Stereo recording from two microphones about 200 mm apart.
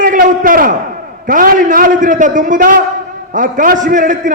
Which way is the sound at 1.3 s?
40° right (ahead or behind).